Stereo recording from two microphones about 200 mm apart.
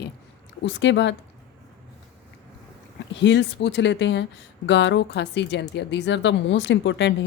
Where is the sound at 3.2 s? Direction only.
60° left (ahead or behind).